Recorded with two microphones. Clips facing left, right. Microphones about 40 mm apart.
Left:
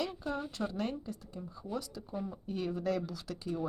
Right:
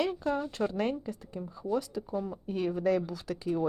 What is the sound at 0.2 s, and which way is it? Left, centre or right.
Speech, centre.